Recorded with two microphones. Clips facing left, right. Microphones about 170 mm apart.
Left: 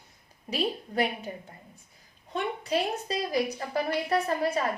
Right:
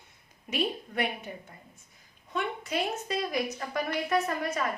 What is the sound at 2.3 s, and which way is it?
A woman's voice, 35° left (ahead or behind).